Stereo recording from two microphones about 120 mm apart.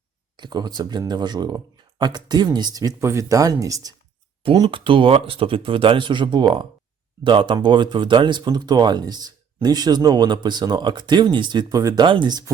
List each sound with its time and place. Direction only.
0.3 s speech: 35° right (ahead or behind)
4.5 s speech: 40° right (ahead or behind)
11.7 s speech: 30° right (ahead or behind)
12.0 s speech: 40° right (ahead or behind)